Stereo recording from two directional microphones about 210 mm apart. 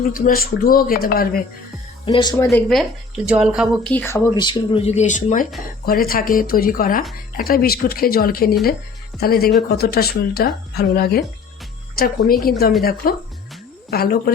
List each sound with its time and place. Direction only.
0.1 s speech: 45° left (ahead or behind)
2.0 s speech: 20° left (ahead or behind)
2.5 s speech: centre (ahead or behind); by 14.3 s 50° left (ahead or behind)